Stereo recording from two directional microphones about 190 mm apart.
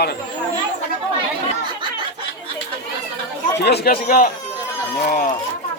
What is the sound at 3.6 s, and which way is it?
A man's voice, 60° left (ahead or behind).